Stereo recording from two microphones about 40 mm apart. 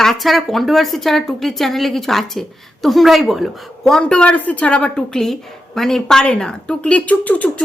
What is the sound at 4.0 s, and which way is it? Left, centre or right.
Speech, left.